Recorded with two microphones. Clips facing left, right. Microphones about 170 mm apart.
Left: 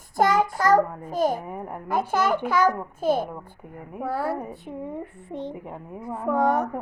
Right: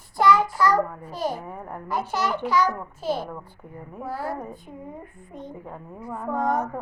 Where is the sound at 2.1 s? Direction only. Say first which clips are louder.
Left 1 dB; 50° left (ahead or behind).